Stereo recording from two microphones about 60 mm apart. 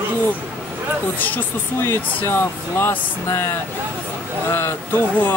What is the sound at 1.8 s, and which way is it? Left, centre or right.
Speech, left.